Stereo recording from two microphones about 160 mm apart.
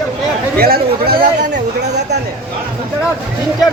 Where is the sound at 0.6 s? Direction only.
70° right (ahead or behind).